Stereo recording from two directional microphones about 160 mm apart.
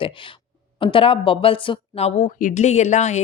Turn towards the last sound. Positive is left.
turn(degrees=45)  # may be behind; listen again after turning